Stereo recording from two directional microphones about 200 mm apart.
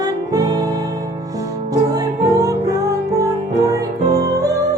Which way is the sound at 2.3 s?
15° right (ahead or behind).